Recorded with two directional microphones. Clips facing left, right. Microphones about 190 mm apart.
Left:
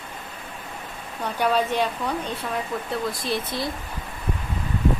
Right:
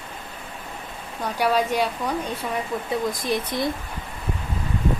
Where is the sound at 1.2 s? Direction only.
10° right (ahead or behind).